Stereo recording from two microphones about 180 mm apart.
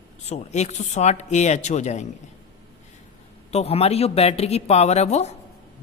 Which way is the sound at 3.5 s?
35° left (ahead or behind).